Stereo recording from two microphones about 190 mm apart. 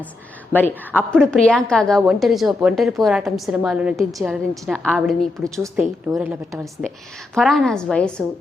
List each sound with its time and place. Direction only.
0.5 s a woman's voice: 10° left (ahead or behind)
5.5 s a woman's voice: 15° right (ahead or behind)
7.3 s a woman's voice: centre (ahead or behind)